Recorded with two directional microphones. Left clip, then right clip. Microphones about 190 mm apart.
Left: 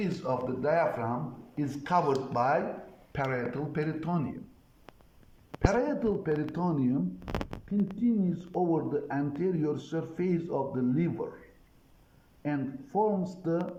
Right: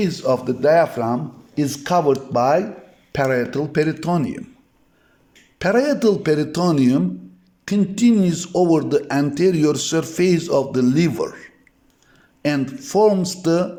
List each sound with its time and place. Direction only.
0.0 s speech: 50° right (ahead or behind)
5.6 s a man's voice: 60° right (ahead or behind)
12.4 s a man's voice: 70° right (ahead or behind)